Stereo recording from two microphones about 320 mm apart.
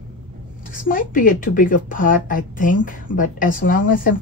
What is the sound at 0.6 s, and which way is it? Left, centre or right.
Speech, left.